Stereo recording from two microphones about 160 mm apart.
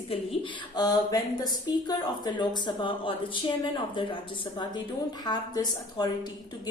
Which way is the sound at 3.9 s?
30° left (ahead or behind).